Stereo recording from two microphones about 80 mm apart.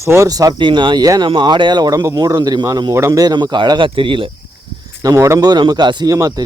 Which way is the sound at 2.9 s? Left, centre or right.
Right.